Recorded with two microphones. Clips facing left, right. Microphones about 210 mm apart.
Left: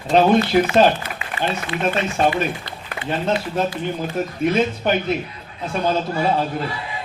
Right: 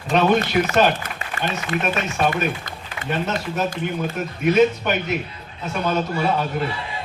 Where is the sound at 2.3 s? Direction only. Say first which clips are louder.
Left 1 dB; 45° right (ahead or behind).